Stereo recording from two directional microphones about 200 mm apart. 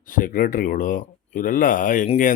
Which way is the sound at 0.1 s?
45° left (ahead or behind).